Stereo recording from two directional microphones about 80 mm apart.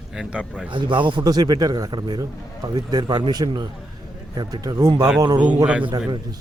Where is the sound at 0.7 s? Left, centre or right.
Right.